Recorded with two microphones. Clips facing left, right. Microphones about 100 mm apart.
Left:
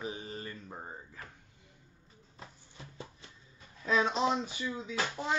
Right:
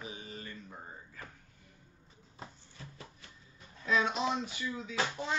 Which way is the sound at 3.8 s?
35° left (ahead or behind).